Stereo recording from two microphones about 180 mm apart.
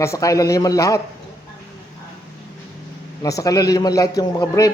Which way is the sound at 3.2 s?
20° left (ahead or behind).